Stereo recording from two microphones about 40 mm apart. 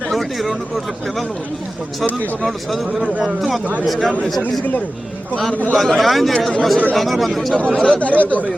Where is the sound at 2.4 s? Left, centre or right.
Centre.